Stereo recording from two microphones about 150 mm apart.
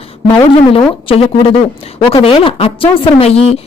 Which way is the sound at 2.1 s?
35° left (ahead or behind).